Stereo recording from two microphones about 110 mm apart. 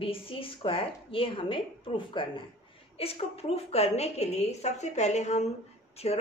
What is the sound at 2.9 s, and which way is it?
A woman's voice, 65° left (ahead or behind).